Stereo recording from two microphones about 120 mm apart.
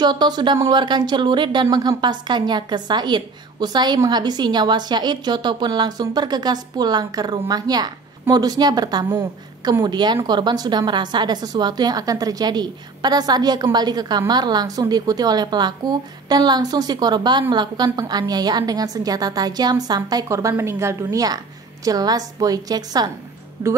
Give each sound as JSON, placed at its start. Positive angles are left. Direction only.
{"t": 0.0, "sound": "a woman's voice", "side_deg": -40}